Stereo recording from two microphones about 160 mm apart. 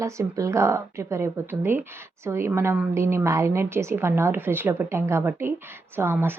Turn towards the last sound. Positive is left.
turn(degrees=-15)  # may be behind; listen again after turning